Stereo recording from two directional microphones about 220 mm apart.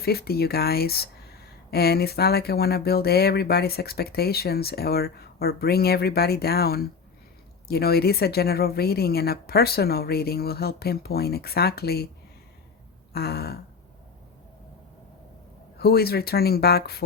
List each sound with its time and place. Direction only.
0.0 s speech: 45° left (ahead or behind)
13.1 s speech: 45° left (ahead or behind)
15.8 s speech: 45° left (ahead or behind)